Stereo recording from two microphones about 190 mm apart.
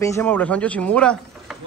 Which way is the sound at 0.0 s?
15° left (ahead or behind).